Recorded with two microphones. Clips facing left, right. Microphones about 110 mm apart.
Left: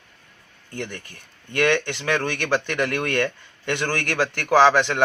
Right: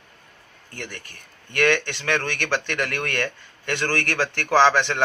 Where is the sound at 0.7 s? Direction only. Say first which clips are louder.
Left 4 dB; 20° left (ahead or behind).